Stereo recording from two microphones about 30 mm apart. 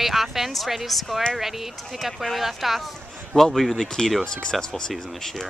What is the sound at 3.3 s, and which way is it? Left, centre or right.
Speech, centre.